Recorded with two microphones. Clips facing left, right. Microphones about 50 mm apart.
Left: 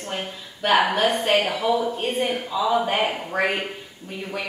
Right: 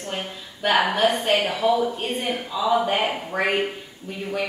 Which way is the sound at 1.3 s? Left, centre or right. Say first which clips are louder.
Left 1 dB; left.